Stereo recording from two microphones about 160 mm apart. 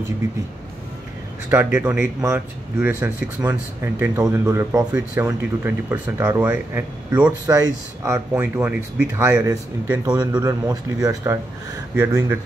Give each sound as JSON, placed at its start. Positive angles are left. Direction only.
{"t": 1.5, "sound": "speech", "side_deg": -10}